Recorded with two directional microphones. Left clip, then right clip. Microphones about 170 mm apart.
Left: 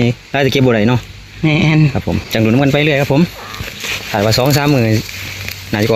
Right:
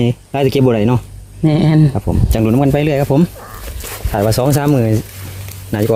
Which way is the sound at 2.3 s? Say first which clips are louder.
Left 1 dB; 10° right (ahead or behind).